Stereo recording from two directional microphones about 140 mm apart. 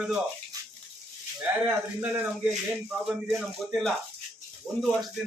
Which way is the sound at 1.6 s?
10° right (ahead or behind).